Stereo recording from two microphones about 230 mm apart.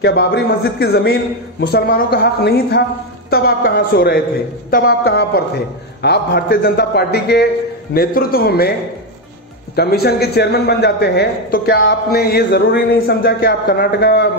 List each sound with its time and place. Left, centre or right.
0.0 s a man's voice: left
9.8 s a man's voice: left